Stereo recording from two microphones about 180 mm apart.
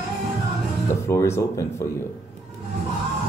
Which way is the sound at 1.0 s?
15° left (ahead or behind).